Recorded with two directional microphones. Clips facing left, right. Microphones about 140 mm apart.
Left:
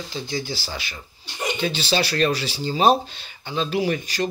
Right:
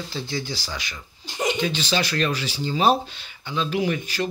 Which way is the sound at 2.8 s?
15° left (ahead or behind).